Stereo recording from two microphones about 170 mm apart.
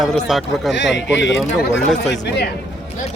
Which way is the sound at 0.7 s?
90° left.